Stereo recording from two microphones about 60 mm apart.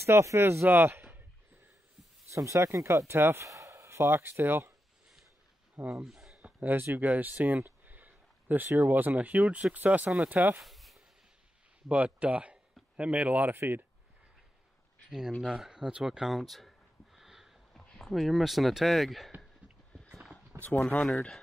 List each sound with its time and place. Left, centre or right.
0.0 s speech: right
2.3 s speech: right
3.4 s speech: right
5.8 s speech: right
6.0 s a sound: centre
6.3 s speech: right
10.6 s a sound: centre
11.9 s speech: right
15.0 s speech: centre
15.4 s a sound: centre
17.9 s speech: centre
19.9 s a sound: centre
20.8 s speech: centre